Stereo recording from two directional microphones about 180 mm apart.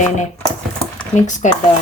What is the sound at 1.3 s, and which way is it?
Speech, 45° left (ahead or behind).